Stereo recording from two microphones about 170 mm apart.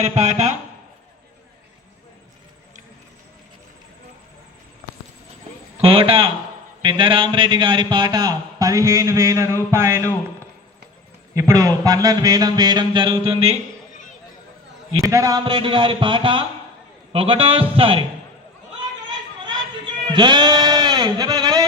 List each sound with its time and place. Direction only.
0.0 s a man's voice: 40° right (ahead or behind)
5.7 s a man's voice: 35° right (ahead or behind); by 9.5 s 15° right (ahead or behind)
9.6 s a sound: 15° right (ahead or behind)
11.3 s speech: 20° right (ahead or behind); by 13.6 s 35° right (ahead or behind)
15.0 s a man's voice: 20° right (ahead or behind)
19.5 s a sound: 25° right (ahead or behind)